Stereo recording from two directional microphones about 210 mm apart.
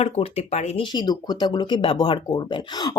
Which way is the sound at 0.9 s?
20° left (ahead or behind).